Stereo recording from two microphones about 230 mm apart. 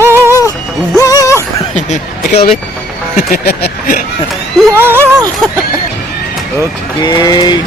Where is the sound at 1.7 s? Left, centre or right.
Left.